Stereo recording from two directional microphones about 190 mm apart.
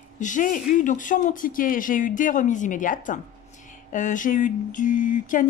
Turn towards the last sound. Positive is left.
turn(degrees=45)  # may be behind; listen again after turning